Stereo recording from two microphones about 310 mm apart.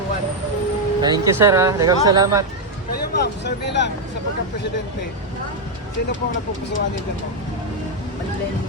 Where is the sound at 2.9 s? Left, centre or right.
Left.